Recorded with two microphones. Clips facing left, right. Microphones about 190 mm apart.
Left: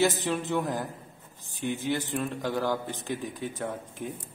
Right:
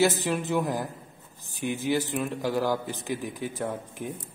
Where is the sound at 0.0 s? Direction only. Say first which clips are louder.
Right 2 dB; 10° right (ahead or behind).